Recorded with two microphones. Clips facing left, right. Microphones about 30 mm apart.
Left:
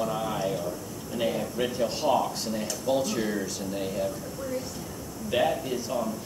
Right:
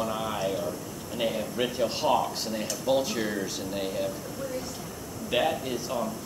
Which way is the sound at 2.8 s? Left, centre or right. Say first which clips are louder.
Right 1 dB; centre.